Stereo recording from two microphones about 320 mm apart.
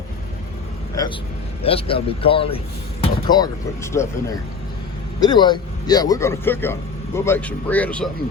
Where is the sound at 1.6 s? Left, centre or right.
Centre.